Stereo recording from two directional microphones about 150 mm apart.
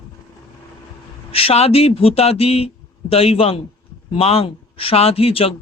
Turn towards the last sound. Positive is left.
turn(degrees=40)  # may be behind; listen again after turning